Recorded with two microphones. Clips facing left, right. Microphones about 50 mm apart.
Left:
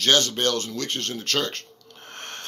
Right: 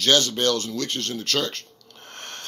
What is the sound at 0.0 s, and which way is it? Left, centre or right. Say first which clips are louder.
Speech: right 1 dB; left.